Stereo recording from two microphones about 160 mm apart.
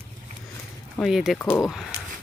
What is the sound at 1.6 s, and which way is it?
Speech, centre (ahead or behind).